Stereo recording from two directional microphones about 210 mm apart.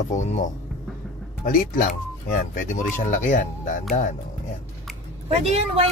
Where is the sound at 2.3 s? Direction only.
40° left (ahead or behind).